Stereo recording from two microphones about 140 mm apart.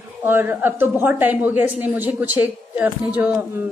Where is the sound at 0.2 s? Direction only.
15° right (ahead or behind).